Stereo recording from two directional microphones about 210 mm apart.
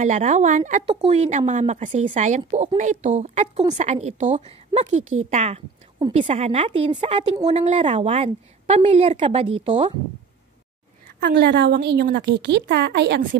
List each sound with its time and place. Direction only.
0.0 s a woman's voice: 35° right (ahead or behind)
11.2 s a woman's voice: 50° right (ahead or behind)